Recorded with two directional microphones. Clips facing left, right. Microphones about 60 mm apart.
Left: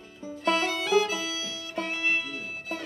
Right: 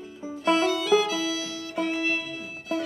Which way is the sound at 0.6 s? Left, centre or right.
Left.